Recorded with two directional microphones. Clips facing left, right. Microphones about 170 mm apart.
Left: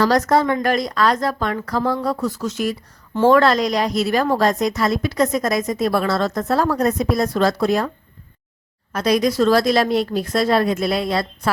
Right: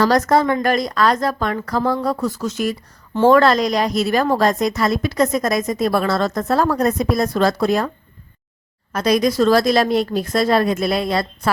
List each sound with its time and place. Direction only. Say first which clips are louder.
0.0 s speech: right 1 dB; 50° right (ahead or behind)
8.9 s speech: right 1 dB; 45° right (ahead or behind)